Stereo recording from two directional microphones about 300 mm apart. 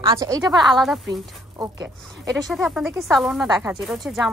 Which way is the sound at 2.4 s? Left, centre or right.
Centre.